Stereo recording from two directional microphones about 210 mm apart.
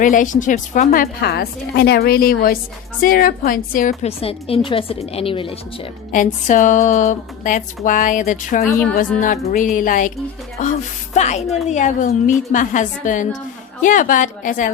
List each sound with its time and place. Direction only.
0.0 s speech: 40° left (ahead or behind)
1.2 s a woman's voice: 50° left (ahead or behind)
4.2 s a woman's voice: 25° left (ahead or behind)
6.1 s speech: 40° left (ahead or behind)